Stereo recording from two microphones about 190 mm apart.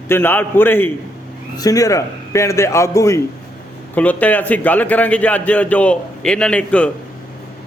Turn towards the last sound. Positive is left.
turn(degrees=5)  # may be behind; listen again after turning